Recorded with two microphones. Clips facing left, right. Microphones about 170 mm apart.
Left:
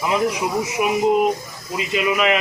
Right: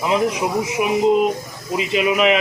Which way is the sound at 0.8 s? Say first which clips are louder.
Even; centre (ahead or behind).